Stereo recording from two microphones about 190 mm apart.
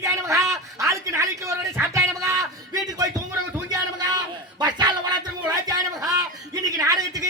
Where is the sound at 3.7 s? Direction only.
20° right (ahead or behind).